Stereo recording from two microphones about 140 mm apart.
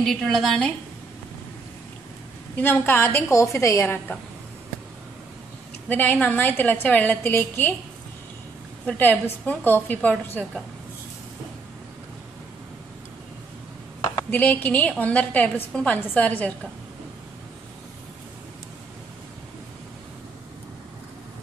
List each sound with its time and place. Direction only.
0.0 s a woman's voice: 5° left (ahead or behind)
2.5 s a woman's voice: 15° left (ahead or behind)
5.9 s a woman's voice: 10° left (ahead or behind)
8.8 s a woman's voice: 10° left (ahead or behind)
14.3 s a woman's voice: 10° left (ahead or behind)